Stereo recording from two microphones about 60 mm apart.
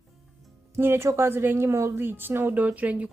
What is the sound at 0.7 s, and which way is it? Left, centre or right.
A woman's voice, right.